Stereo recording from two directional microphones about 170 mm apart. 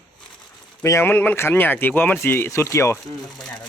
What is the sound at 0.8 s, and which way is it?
Speech, 15° left (ahead or behind).